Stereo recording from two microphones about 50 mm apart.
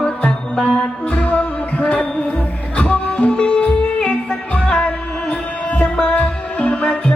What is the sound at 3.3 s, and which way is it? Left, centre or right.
Music, centre.